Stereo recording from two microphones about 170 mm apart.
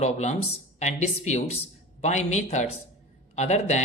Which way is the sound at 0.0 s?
45° left (ahead or behind).